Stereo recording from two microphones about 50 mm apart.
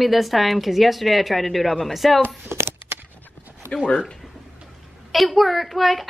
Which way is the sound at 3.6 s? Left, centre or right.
Right.